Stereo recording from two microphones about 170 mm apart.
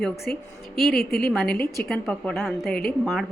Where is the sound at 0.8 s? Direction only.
60° left (ahead or behind).